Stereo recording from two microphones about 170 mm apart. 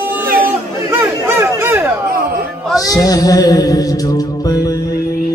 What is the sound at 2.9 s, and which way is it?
Mantra, 20° left (ahead or behind).